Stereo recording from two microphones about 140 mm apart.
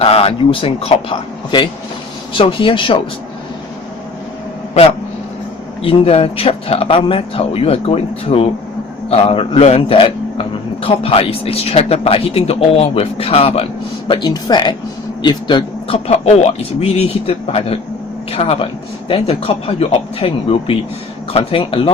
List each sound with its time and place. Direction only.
0.0 s a man's voice: 45° left (ahead or behind)
5.8 s speech: 45° left (ahead or behind)
14.1 s speech: 30° left (ahead or behind)